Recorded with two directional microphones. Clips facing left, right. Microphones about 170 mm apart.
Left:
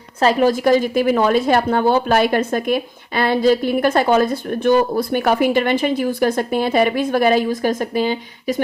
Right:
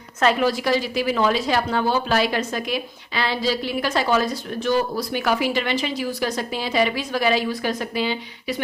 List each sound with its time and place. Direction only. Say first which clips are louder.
0.2 s a woman's voice: left 5 dB; 40° left (ahead or behind)